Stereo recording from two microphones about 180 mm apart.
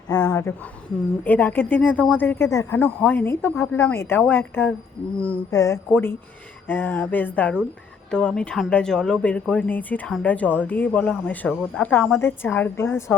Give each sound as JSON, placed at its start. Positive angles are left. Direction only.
{"t": 0.1, "sound": "speech", "side_deg": 20}